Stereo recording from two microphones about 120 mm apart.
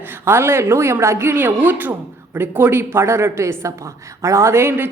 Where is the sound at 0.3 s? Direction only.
20° right (ahead or behind).